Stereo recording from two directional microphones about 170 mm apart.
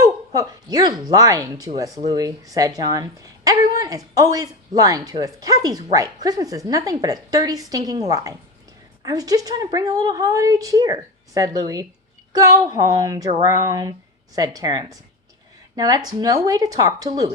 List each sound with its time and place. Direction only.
0.0 s a woman's voice: 20° right (ahead or behind)